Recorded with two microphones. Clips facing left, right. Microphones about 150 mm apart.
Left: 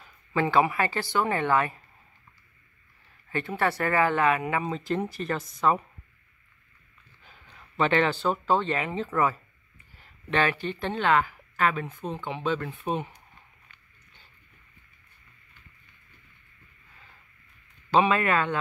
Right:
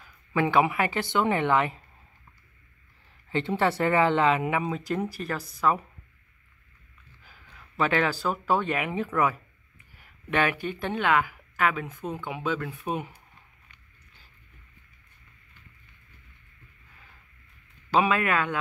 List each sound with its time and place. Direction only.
0.3 s speech: 15° right (ahead or behind)
3.3 s speech: 20° right (ahead or behind); by 5.8 s centre (ahead or behind)
7.5 s speech: 5° right (ahead or behind)
17.9 s speech: 5° right (ahead or behind)